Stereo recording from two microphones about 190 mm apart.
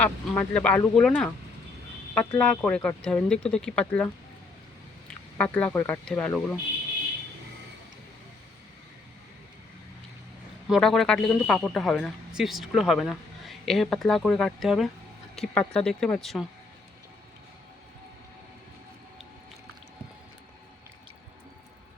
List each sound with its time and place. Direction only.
0.0 s speech: 5° left (ahead or behind)
2.4 s a man's voice: 5° left (ahead or behind)
5.4 s speech: 5° left (ahead or behind)
10.7 s a man's voice: centre (ahead or behind)